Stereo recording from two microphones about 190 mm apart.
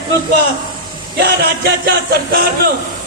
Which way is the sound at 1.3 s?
55° right (ahead or behind).